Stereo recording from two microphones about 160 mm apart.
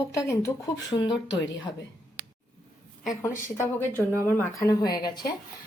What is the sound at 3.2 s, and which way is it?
Speech, 15° left (ahead or behind).